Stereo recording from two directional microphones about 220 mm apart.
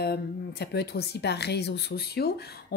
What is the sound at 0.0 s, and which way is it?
Speech, 45° left (ahead or behind).